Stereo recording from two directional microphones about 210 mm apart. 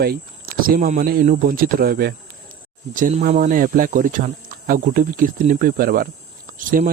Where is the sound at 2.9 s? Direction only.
35° right (ahead or behind).